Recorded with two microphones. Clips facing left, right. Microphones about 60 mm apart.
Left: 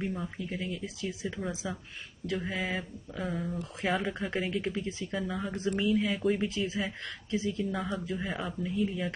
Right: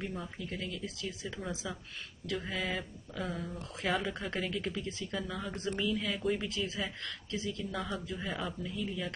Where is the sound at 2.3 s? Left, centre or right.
Centre; by 5.0 s left.